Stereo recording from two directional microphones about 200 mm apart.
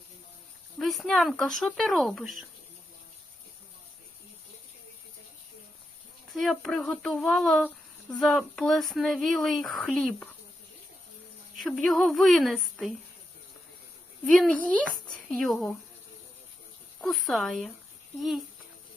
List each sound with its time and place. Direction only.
0.8 s speech: centre (ahead or behind)
6.3 s speech: centre (ahead or behind)
11.5 s speech: 5° left (ahead or behind)
14.3 s speech: centre (ahead or behind)
17.0 s speech: centre (ahead or behind)